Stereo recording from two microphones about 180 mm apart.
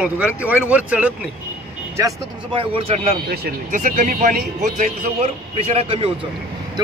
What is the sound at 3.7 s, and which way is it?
A man's voice, 45° right (ahead or behind).